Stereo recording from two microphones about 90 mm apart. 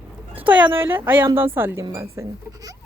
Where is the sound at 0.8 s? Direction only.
25° right (ahead or behind).